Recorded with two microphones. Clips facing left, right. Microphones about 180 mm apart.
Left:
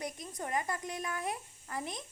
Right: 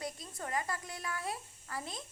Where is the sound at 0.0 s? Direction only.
20° left (ahead or behind).